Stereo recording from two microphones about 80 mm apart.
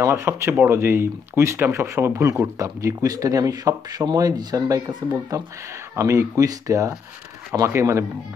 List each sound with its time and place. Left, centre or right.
0.0 s speech: right